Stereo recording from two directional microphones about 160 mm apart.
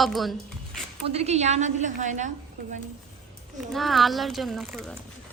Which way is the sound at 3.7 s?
Centre (ahead or behind).